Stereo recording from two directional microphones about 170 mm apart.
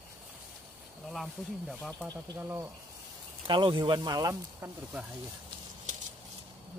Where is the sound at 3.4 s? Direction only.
30° right (ahead or behind).